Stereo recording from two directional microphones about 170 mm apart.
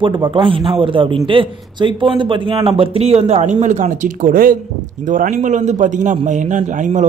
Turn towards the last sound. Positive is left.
turn(degrees=-50)  # may be behind; listen again after turning